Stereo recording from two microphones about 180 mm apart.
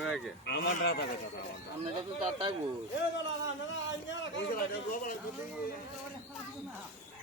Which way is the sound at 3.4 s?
90° left.